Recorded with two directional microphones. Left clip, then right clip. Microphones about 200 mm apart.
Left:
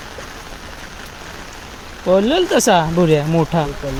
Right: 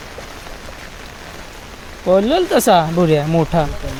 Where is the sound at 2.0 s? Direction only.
Centre (ahead or behind).